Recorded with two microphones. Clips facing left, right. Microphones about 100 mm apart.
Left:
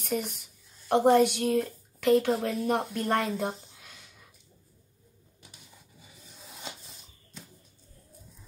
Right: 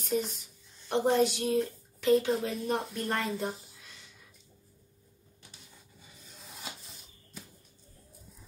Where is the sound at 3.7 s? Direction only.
55° left (ahead or behind).